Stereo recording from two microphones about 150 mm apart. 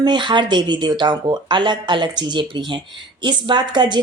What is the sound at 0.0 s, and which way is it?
Speech, 30° right (ahead or behind).